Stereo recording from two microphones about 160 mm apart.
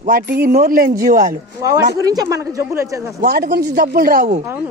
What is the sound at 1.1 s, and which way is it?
Speech, 55° right (ahead or behind).